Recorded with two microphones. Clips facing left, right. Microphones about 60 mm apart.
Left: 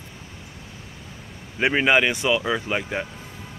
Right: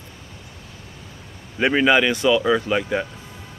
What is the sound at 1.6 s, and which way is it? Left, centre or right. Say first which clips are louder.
Speech: right 2 dB; centre.